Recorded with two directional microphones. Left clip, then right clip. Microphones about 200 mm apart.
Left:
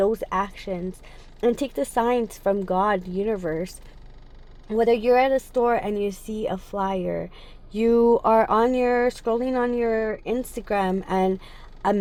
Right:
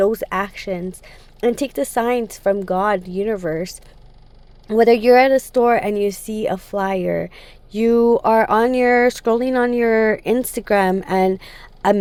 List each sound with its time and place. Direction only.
0.0 s speech: 10° right (ahead or behind)
4.7 s speech: 20° right (ahead or behind)